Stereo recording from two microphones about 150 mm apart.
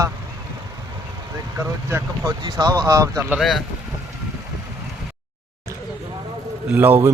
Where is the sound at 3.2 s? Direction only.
Centre (ahead or behind).